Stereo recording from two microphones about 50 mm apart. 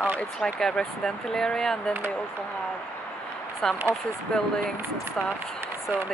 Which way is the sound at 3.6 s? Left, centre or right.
Centre.